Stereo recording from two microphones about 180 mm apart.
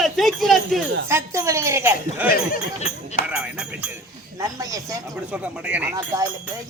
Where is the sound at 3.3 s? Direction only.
5° right (ahead or behind).